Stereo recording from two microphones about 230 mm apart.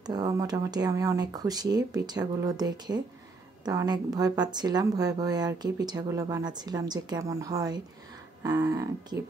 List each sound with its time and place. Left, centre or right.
0.0 s speech: centre